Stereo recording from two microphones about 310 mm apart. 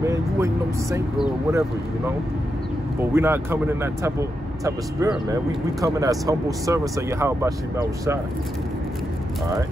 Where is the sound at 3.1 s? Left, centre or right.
Centre.